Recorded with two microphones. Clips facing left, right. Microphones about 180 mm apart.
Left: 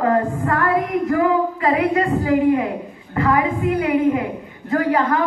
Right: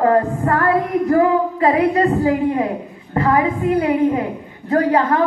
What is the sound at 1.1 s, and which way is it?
Singing, 35° right (ahead or behind).